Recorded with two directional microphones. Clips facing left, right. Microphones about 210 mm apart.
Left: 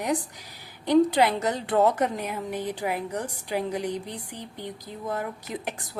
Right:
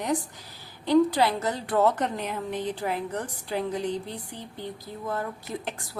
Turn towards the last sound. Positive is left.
turn(degrees=20)  # may be behind; listen again after turning